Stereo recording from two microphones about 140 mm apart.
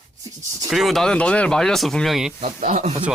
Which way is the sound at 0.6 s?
Centre (ahead or behind).